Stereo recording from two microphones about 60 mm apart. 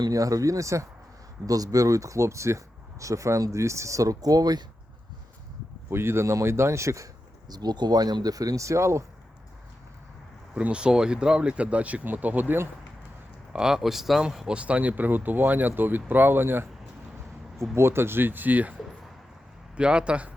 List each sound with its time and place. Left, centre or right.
0.1 s speech: right
1.5 s speech: right
5.9 s a man's voice: right
7.5 s speech: right
10.5 s speech: centre
13.5 s speech: centre
14.5 s speech: right
17.7 s speech: right
19.7 s speech: centre